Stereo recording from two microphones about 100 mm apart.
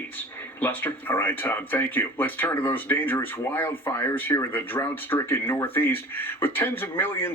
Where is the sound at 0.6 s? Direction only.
20° left (ahead or behind).